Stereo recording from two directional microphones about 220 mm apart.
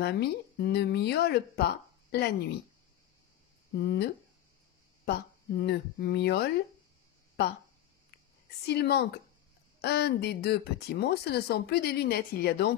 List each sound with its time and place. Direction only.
0.0 s speech: 45° left (ahead or behind)
3.7 s speech: 45° left (ahead or behind)
8.6 s speech: 45° left (ahead or behind)